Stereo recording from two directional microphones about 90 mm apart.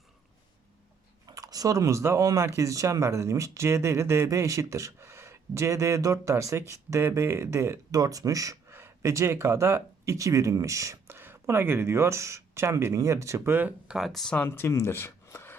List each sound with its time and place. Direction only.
1.3 s speech: 45° right (ahead or behind)
8.7 s speech: 30° right (ahead or behind)
13.9 s speech: centre (ahead or behind)
14.3 s speech: 25° left (ahead or behind)